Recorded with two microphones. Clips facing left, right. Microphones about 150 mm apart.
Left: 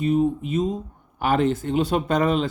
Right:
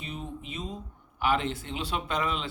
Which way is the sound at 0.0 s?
45° left (ahead or behind).